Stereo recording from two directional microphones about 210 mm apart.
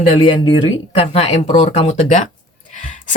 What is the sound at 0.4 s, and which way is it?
Speech, 25° left (ahead or behind).